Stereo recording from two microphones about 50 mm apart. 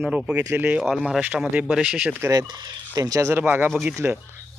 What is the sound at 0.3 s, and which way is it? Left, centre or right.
Speech, right.